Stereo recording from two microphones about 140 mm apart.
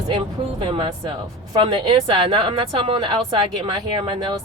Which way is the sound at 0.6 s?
40° right (ahead or behind).